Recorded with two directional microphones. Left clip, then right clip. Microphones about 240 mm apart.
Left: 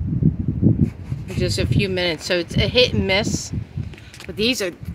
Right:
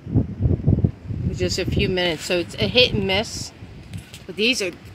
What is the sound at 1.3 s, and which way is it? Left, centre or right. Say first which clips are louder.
Speech: left 1 dB; centre.